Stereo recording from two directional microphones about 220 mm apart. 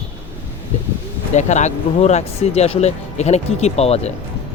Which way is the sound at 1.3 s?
30° left (ahead or behind).